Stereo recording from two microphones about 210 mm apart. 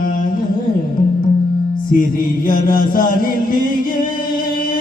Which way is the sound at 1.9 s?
40° left (ahead or behind).